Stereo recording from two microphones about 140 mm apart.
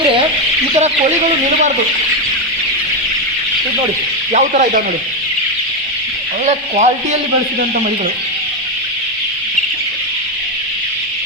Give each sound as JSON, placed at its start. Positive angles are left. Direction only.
{"t": 4.3, "sound": "speech", "side_deg": -60}
{"t": 6.4, "sound": "speech", "side_deg": -55}